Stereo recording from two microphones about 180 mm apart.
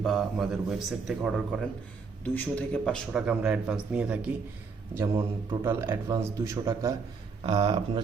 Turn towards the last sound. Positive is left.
turn(degrees=-25)  # may be behind; listen again after turning